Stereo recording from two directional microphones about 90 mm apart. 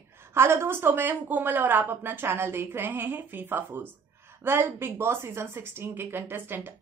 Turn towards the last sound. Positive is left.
turn(degrees=-25)  # may be behind; listen again after turning